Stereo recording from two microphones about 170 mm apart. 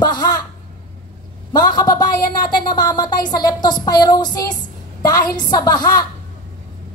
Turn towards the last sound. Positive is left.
turn(degrees=25)  # may be behind; listen again after turning